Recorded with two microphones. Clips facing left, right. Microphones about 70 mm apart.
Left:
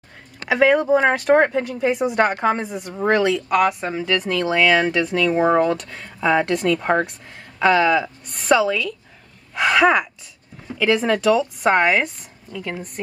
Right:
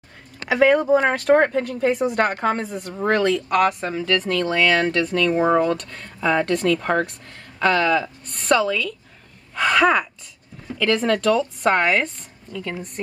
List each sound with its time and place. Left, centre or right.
0.5 s a woman's voice: centre
5.3 s speech: centre
5.6 s a woman's voice: centre